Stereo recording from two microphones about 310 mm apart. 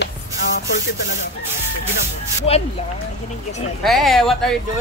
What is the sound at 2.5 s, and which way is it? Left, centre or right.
Speech, centre.